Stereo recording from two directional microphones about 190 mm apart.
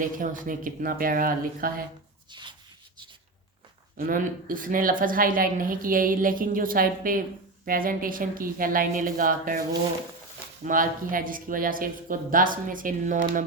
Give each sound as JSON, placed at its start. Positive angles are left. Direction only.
{"t": 0.0, "sound": "a woman's voice", "side_deg": -45}
{"t": 2.3, "sound": "shuffle", "side_deg": -25}
{"t": 3.9, "sound": "a woman's voice", "side_deg": -50}
{"t": 10.6, "sound": "a woman's voice", "side_deg": -45}